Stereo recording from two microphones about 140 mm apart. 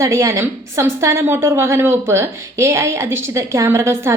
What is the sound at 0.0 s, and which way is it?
A woman's voice, 20° right (ahead or behind).